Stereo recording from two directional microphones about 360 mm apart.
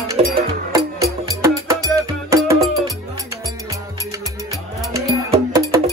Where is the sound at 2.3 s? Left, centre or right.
Centre.